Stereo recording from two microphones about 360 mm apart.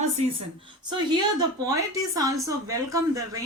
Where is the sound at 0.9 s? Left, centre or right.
Centre.